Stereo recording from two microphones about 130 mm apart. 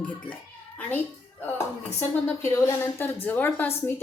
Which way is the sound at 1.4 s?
15° left (ahead or behind).